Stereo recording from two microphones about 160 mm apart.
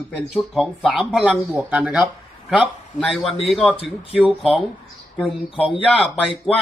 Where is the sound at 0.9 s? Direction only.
Centre (ahead or behind).